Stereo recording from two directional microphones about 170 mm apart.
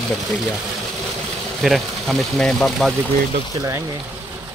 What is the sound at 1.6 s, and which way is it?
Speech, centre (ahead or behind).